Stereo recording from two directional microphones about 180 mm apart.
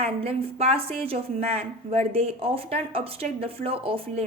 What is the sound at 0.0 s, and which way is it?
A woman's voice, 35° right (ahead or behind).